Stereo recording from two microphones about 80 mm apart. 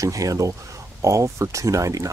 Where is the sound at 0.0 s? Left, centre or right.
Right.